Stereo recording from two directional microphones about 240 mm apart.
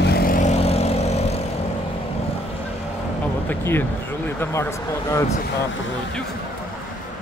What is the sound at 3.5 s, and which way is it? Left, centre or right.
Speech, centre.